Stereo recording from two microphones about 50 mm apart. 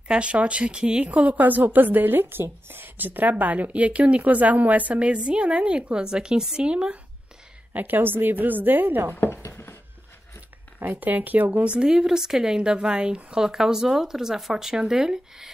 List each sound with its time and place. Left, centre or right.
0.1 s a woman's voice: right
7.7 s speech: right
9.5 s a sound: left
10.8 s speech: right
11.6 s a woman's voice: right
11.9 s a woman's voice: centre